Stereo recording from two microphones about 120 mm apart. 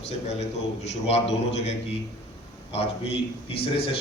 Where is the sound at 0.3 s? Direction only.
70° left (ahead or behind).